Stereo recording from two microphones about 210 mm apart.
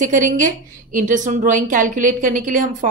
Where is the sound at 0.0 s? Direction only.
35° right (ahead or behind).